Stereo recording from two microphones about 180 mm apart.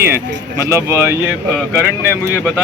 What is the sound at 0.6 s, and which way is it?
Speech, 15° right (ahead or behind).